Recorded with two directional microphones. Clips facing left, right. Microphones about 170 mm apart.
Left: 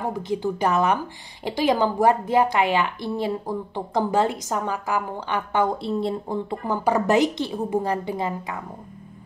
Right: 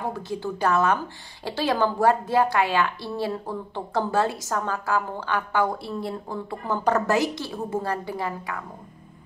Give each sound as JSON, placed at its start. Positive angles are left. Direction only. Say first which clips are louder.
{"t": 0.0, "sound": "a woman's voice", "louder": "left 4 dB", "side_deg": 15}